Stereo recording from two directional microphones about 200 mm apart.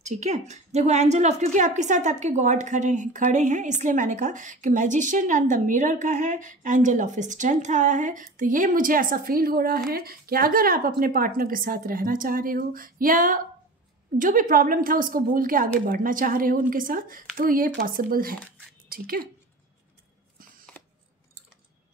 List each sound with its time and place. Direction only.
0.0 s a woman's voice: 35° right (ahead or behind)